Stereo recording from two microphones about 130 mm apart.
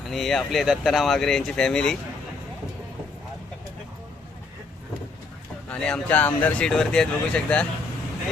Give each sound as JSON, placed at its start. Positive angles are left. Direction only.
{"t": 0.1, "sound": "speech", "side_deg": 0}
{"t": 5.6, "sound": "speech", "side_deg": 10}